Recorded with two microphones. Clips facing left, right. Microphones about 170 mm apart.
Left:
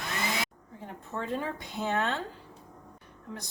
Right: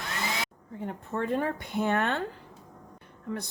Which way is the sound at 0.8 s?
55° right (ahead or behind).